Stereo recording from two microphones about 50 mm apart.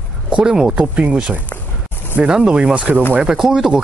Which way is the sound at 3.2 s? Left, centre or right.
Centre.